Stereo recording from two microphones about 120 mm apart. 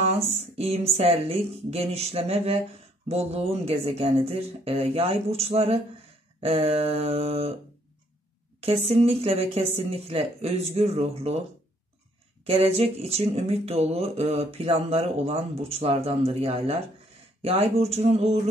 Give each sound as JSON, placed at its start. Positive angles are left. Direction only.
{"t": 0.0, "sound": "speech", "side_deg": -60}
{"t": 8.5, "sound": "speech", "side_deg": -55}
{"t": 12.4, "sound": "speech", "side_deg": -55}